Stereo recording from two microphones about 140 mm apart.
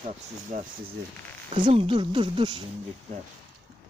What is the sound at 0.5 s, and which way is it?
Speech, 70° right (ahead or behind).